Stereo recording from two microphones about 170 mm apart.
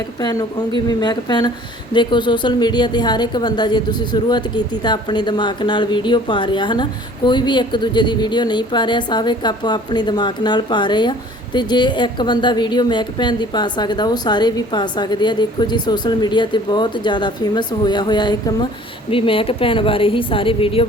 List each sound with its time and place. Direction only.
0.2 s a woman's voice: 25° left (ahead or behind)